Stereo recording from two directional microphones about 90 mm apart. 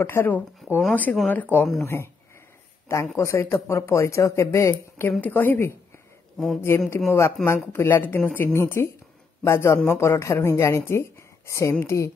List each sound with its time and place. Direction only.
0.0 s speech: 25° left (ahead or behind)
1.8 s speech: 30° left (ahead or behind)
5.2 s speech: 20° left (ahead or behind)
6.3 s speech: centre (ahead or behind)
7.1 s speech: 30° left (ahead or behind)